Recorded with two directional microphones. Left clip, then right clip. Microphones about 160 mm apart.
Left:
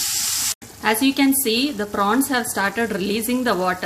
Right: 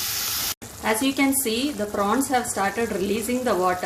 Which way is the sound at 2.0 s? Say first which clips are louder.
Left 3 dB; 50° left (ahead or behind).